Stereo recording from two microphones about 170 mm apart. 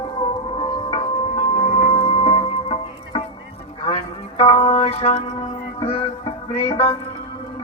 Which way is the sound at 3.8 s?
35° left (ahead or behind).